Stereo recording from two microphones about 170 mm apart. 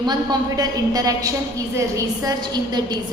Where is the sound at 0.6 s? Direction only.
20° right (ahead or behind).